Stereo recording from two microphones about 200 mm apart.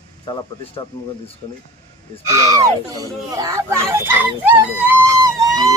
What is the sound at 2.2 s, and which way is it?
Speech, 15° right (ahead or behind).